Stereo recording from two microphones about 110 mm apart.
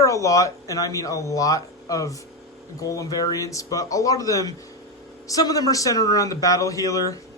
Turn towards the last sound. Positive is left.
turn(degrees=30)  # may be behind; listen again after turning